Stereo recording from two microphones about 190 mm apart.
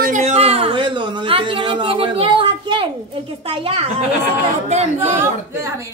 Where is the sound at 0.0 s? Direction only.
40° right (ahead or behind).